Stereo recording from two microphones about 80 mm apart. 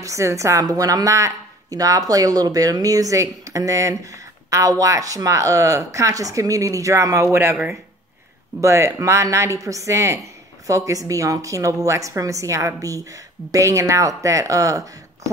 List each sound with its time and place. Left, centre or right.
0.0 s a woman's voice: right
8.5 s a woman's voice: right